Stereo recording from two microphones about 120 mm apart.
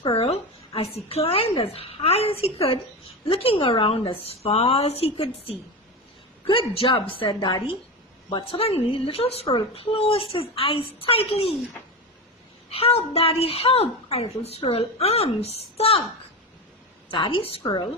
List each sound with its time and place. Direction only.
0.0 s a woman's voice: 50° left (ahead or behind)
8.5 s a woman's voice: 55° left (ahead or behind)
13.0 s a woman's voice: 55° left (ahead or behind)
17.1 s a woman's voice: 45° left (ahead or behind)